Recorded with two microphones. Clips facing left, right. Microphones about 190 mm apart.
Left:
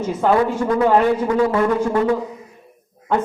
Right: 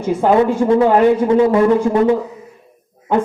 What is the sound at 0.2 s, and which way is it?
A man's voice, 20° right (ahead or behind).